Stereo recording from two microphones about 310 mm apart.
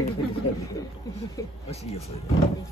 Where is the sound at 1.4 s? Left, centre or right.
Centre.